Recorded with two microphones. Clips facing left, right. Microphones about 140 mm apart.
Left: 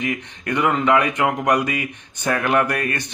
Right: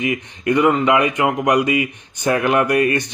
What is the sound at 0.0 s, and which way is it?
A man's voice, 10° right (ahead or behind).